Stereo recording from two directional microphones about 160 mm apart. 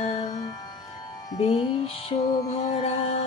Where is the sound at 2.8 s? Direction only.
40° left (ahead or behind).